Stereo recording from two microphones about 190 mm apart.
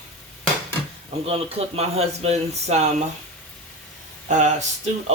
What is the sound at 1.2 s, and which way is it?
Speech, 30° right (ahead or behind).